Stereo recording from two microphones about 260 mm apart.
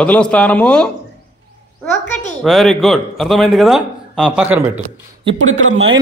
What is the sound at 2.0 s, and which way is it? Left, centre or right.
Speech, centre.